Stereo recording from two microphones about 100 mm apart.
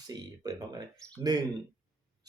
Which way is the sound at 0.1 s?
40° right (ahead or behind).